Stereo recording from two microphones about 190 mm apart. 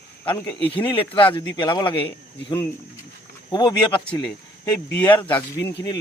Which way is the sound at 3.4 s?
20° left (ahead or behind).